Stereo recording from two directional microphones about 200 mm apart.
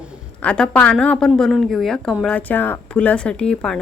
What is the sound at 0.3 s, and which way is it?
A woman's voice, 5° left (ahead or behind).